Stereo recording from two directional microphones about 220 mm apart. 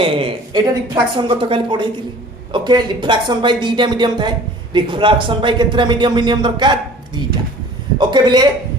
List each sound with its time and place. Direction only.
0.0 s a woman's voice: 25° right (ahead or behind)